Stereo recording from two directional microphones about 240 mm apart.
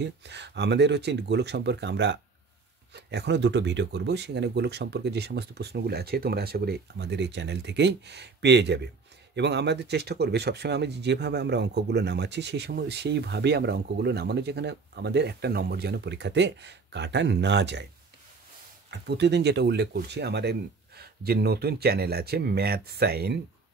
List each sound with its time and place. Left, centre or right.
0.0 s speech: right
18.9 s speech: right